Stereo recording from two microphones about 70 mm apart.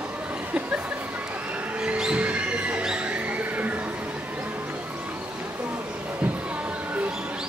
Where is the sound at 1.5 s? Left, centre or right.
Centre.